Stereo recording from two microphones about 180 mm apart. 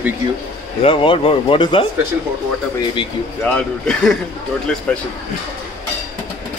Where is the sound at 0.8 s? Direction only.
30° left (ahead or behind).